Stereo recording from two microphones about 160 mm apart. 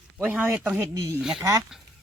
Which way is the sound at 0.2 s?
10° right (ahead or behind).